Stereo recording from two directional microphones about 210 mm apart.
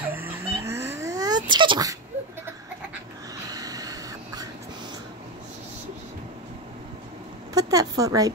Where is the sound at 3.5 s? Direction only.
15° right (ahead or behind).